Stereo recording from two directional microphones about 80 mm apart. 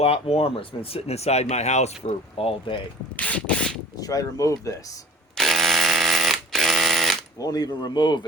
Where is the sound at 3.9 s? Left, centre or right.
Left.